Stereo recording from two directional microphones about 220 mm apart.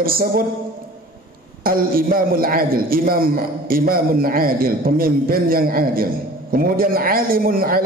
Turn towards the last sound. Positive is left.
turn(degrees=-40)  # may be behind; listen again after turning